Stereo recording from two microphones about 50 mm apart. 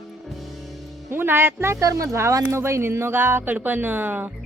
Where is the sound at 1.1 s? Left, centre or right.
Right.